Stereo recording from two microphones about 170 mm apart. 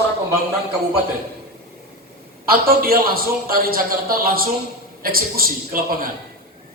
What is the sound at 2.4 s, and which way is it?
A man's voice, 60° right (ahead or behind).